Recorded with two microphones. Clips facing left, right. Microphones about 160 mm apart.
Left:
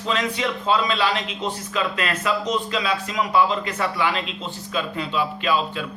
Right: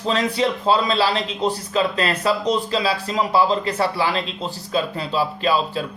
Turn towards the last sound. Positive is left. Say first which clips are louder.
# right 2 dB
turn(degrees=-35)  # may be behind; listen again after turning